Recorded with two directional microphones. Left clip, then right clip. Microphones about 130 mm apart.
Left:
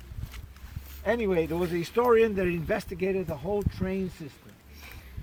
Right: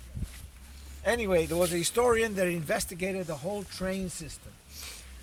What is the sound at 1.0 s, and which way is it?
Speech, 60° right (ahead or behind).